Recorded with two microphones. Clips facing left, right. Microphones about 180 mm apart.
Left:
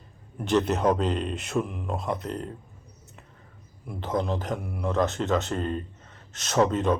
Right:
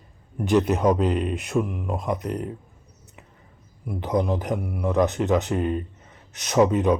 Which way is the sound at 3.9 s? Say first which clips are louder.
Right 4 dB; 15° right (ahead or behind).